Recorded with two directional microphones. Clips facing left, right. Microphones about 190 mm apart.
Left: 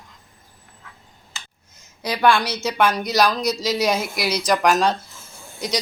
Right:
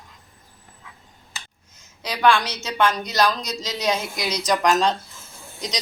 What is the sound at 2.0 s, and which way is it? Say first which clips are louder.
Speech: left 1 dB; 10° left (ahead or behind).